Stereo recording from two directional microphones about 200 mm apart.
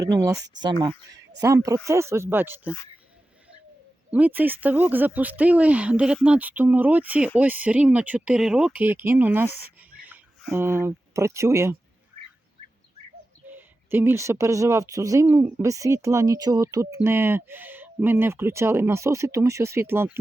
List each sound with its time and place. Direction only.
0.0 s speech: 15° right (ahead or behind)
2.6 s speech: 10° left (ahead or behind)
4.1 s speech: 10° right (ahead or behind)
13.5 s speech: 10° right (ahead or behind)